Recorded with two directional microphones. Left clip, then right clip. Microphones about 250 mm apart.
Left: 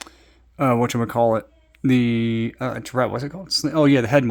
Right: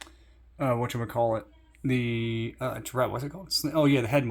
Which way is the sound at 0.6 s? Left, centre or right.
Left.